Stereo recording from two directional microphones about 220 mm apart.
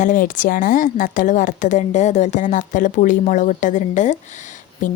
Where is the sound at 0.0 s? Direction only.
35° left (ahead or behind).